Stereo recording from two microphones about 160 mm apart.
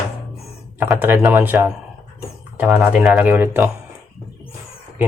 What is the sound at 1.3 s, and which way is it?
Speech, 15° right (ahead or behind).